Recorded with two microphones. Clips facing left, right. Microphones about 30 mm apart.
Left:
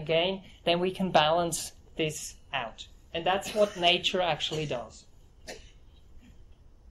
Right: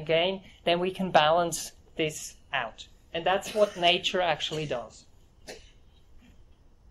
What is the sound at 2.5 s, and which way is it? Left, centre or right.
A woman's voice, right.